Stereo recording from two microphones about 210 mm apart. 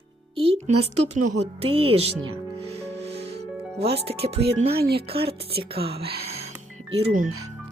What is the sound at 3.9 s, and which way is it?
Speech, 30° right (ahead or behind).